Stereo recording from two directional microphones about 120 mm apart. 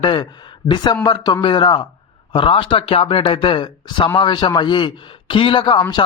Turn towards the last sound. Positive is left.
turn(degrees=40)  # may be behind; listen again after turning